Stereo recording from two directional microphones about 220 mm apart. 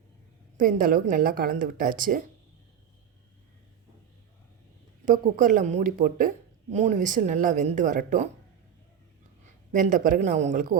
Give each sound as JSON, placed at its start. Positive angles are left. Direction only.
{"t": 0.5, "sound": "speech", "side_deg": -35}
{"t": 5.0, "sound": "speech", "side_deg": -35}
{"t": 9.7, "sound": "speech", "side_deg": -35}